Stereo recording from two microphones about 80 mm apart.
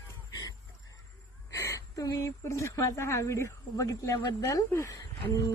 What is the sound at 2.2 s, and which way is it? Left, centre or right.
Speech, left.